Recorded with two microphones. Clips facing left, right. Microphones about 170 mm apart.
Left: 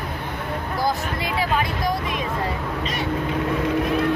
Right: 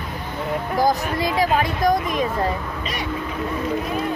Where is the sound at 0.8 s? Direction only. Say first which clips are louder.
Right 5 dB; 40° right (ahead or behind).